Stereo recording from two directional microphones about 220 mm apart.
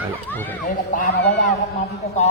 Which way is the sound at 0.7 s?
40° left (ahead or behind).